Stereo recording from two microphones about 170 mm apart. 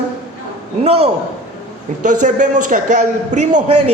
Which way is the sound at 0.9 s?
35° right (ahead or behind).